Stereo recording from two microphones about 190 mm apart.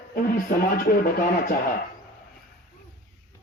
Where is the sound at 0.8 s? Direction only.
50° left (ahead or behind).